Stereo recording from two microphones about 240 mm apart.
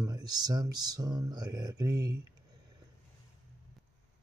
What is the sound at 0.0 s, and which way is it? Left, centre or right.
Speech, centre.